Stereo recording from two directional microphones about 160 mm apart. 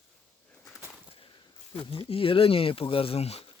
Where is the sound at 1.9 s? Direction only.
35° left (ahead or behind).